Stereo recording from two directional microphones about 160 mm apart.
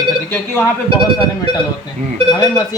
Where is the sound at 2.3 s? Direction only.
25° left (ahead or behind).